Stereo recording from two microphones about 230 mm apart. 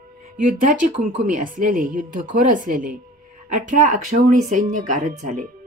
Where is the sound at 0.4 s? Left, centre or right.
Right.